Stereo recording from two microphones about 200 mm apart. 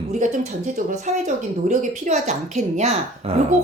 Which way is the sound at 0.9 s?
35° right (ahead or behind).